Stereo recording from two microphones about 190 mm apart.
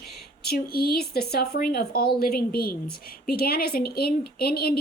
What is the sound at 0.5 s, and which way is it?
Speech, 50° left (ahead or behind).